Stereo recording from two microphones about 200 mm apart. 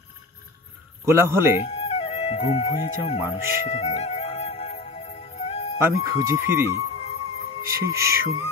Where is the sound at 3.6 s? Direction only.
35° left (ahead or behind).